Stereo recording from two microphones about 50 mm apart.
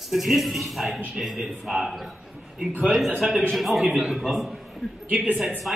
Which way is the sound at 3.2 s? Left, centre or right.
Centre.